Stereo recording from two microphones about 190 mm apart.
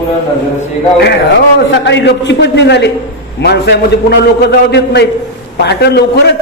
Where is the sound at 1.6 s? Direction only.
70° left (ahead or behind).